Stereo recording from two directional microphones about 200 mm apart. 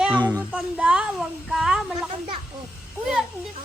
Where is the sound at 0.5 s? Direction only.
5° right (ahead or behind).